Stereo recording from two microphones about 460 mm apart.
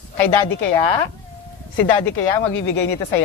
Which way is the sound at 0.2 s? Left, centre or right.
Left.